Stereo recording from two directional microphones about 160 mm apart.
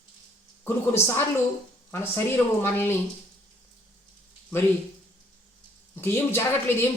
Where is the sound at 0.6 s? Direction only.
15° left (ahead or behind).